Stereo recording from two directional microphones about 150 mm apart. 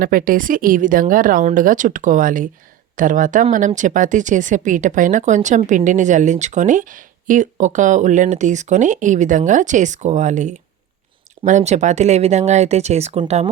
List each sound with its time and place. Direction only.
0.0 s speech: 70° right (ahead or behind); by 13.5 s 40° right (ahead or behind)